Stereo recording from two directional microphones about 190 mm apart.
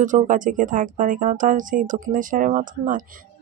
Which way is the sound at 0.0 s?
45° right (ahead or behind).